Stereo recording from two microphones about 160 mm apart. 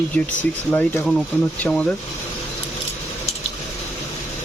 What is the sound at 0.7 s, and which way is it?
Speech, 10° left (ahead or behind).